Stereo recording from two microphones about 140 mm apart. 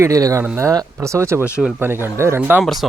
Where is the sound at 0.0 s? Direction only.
25° right (ahead or behind).